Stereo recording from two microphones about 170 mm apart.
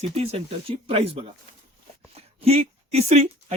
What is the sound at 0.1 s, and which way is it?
Speech, 35° right (ahead or behind).